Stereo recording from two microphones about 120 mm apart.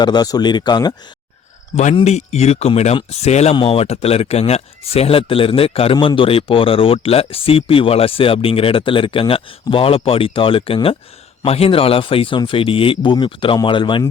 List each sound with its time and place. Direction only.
0.0 s speech: 35° left (ahead or behind)
1.7 s speech: 70° left (ahead or behind)
3.5 s speech: 50° left (ahead or behind)